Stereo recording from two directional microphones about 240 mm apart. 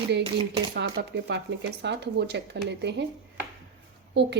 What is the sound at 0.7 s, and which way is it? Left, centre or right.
Speech, right.